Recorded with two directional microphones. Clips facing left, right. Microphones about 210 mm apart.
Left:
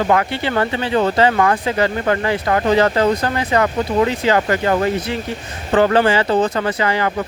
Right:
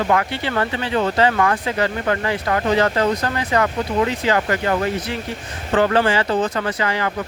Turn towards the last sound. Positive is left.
turn(degrees=25)  # may be behind; listen again after turning